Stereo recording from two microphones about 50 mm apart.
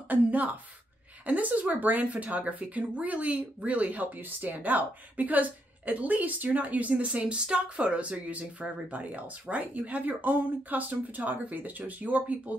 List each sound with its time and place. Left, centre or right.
0.1 s speech: right